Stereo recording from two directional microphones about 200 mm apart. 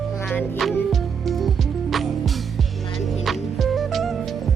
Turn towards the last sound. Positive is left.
turn(degrees=0)  # may be behind; listen again after turning